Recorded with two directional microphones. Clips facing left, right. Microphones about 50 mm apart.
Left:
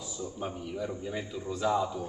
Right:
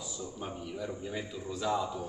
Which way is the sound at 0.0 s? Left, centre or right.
Centre.